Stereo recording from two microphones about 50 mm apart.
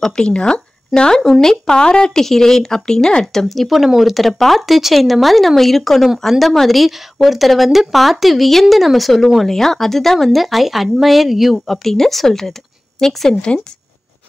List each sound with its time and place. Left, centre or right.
0.0 s speech: centre
3.4 s speech: centre